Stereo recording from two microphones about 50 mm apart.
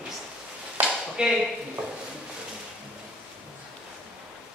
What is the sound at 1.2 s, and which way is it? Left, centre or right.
Speech, centre.